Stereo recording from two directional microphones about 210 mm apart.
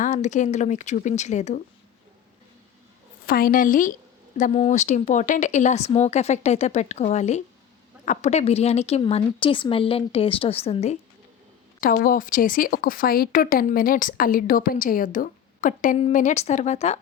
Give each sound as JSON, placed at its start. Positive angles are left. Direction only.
{"t": 0.0, "sound": "speech", "side_deg": 35}
{"t": 3.2, "sound": "a woman's voice", "side_deg": 45}
{"t": 11.8, "sound": "speech", "side_deg": 45}